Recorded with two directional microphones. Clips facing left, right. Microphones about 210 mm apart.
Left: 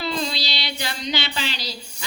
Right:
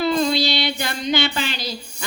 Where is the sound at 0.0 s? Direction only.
50° right (ahead or behind).